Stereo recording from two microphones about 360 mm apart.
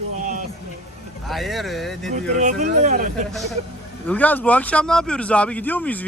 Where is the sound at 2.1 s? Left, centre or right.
Right.